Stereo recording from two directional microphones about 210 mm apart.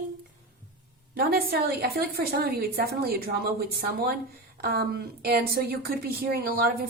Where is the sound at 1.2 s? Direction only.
45° right (ahead or behind).